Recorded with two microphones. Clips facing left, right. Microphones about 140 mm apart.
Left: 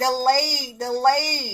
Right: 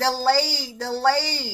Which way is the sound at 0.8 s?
20° left (ahead or behind).